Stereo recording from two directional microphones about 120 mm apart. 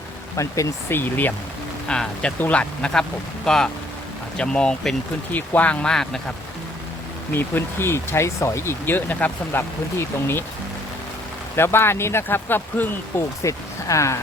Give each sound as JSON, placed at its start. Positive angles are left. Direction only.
{"t": 0.3, "sound": "speech", "side_deg": 25}
{"t": 7.3, "sound": "speech", "side_deg": 20}
{"t": 11.5, "sound": "speech", "side_deg": 20}
{"t": 13.4, "sound": "speech", "side_deg": 25}